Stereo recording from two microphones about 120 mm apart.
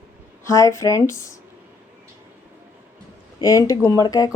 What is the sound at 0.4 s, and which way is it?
Speech, 25° left (ahead or behind).